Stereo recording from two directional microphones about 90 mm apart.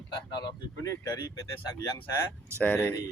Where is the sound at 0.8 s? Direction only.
40° left (ahead or behind).